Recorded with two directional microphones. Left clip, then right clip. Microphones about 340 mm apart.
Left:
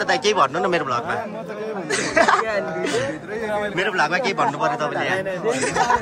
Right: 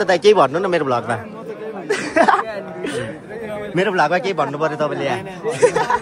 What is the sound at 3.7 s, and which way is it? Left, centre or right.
A man's voice, centre.